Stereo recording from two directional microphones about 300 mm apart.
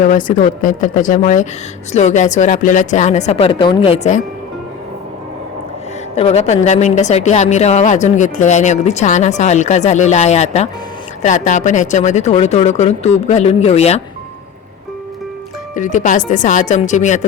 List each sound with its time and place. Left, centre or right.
0.0 s a woman's voice: left
6.1 s a woman's voice: left
15.7 s a woman's voice: left